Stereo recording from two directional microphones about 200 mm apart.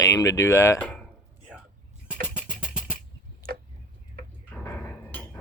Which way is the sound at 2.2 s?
5° right (ahead or behind).